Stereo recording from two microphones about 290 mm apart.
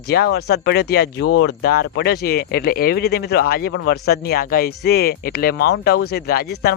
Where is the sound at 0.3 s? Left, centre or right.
Left.